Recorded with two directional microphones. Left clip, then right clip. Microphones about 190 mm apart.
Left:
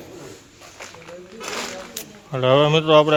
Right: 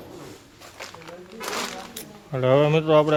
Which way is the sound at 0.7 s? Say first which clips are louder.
Left 1 dB; 5° right (ahead or behind).